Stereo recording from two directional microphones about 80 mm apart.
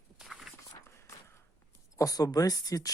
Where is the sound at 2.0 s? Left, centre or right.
Left.